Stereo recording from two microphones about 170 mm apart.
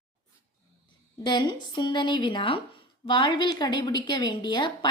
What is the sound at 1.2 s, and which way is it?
A woman's voice, 25° left (ahead or behind).